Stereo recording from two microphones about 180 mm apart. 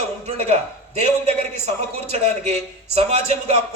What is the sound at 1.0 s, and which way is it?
A man's voice, 40° right (ahead or behind).